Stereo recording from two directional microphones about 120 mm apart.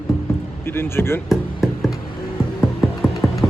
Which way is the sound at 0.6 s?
20° left (ahead or behind).